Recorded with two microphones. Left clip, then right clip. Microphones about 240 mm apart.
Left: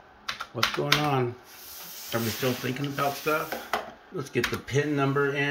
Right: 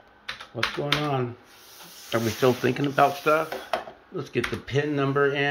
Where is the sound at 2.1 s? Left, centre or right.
Centre.